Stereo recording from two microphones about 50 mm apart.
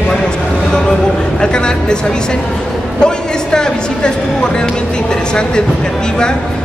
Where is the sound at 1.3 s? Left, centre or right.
Centre.